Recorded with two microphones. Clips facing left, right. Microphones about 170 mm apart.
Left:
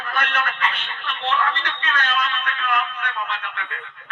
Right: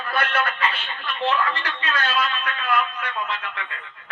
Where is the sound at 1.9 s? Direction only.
35° right (ahead or behind).